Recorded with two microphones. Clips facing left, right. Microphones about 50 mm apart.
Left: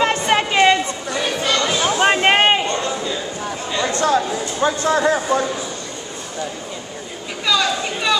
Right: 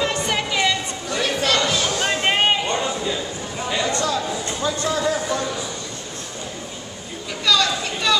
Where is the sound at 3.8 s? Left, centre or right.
Left.